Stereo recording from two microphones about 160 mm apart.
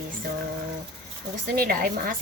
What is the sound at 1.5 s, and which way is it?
Speech, 65° right (ahead or behind).